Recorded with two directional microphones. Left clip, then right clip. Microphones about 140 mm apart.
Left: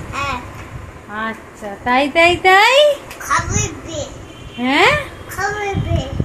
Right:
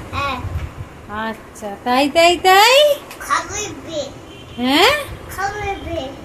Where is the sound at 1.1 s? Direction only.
15° right (ahead or behind).